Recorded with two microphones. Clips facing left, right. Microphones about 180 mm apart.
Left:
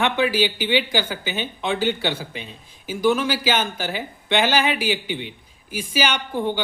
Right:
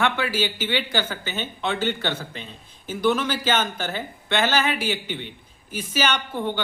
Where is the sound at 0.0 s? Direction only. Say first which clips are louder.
Left 3 dB; 15° left (ahead or behind).